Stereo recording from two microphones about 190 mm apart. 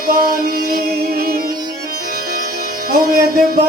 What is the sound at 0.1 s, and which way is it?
Music, 50° right (ahead or behind).